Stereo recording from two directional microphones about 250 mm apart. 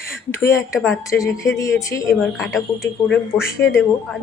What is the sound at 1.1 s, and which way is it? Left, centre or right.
Speech, centre.